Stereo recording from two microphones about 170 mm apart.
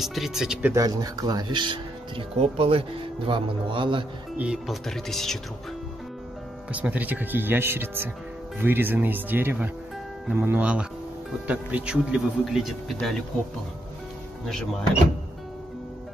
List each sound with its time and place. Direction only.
0.0 s speech: centre (ahead or behind)
0.7 s speech: 20° right (ahead or behind)
4.4 s speech: 5° right (ahead or behind)
6.7 s speech: 10° right (ahead or behind)